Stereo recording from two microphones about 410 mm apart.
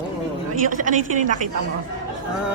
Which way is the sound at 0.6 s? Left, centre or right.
Centre.